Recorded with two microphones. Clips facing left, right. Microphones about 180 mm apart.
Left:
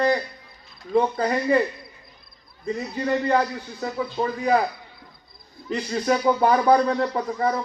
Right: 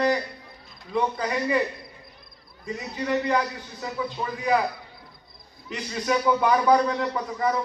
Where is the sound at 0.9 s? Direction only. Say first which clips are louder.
Left 5 dB; 45° left (ahead or behind).